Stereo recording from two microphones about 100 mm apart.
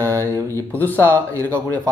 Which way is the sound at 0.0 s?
30° right (ahead or behind).